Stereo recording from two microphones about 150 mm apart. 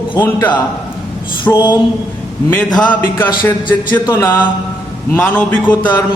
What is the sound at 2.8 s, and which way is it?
A man's voice, 10° left (ahead or behind).